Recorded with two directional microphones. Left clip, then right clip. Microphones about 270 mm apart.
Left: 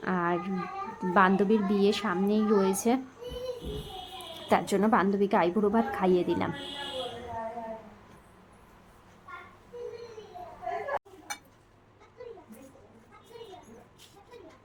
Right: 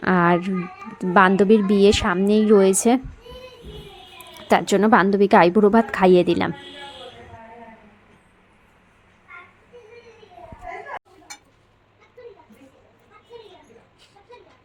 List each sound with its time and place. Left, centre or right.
0.0 s babbling: right
0.9 s a woman's voice: right
4.4 s a woman's voice: right